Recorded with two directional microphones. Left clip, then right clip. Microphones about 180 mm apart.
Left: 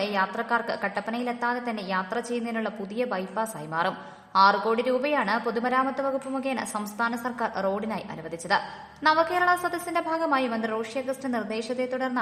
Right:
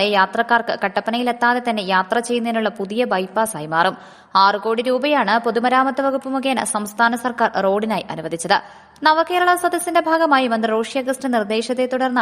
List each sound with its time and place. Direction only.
0.0 s a woman's voice: 45° right (ahead or behind)